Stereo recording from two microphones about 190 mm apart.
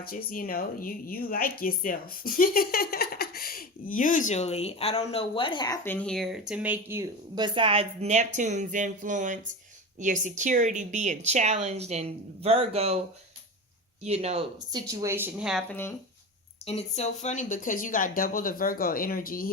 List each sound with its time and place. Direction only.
0.0 s speech: 50° left (ahead or behind); by 7.0 s 10° right (ahead or behind)
7.3 s speech: 25° right (ahead or behind)
14.0 s speech: 35° right (ahead or behind)
14.7 s speech: 20° right (ahead or behind)
15.7 s speech: 10° left (ahead or behind)
16.6 s speech: 35° left (ahead or behind)